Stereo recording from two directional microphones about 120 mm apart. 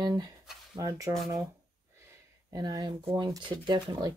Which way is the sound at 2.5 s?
35° right (ahead or behind).